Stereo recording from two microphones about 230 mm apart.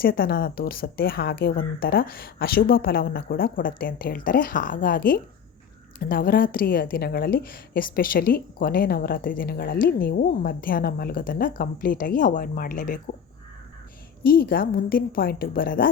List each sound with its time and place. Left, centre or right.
0.0 s a woman's voice: left
14.3 s a woman's voice: left